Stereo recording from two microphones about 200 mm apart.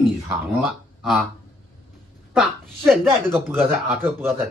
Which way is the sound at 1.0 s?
Centre (ahead or behind).